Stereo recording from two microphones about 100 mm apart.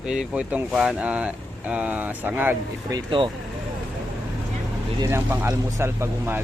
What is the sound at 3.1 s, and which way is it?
Speech, 55° right (ahead or behind).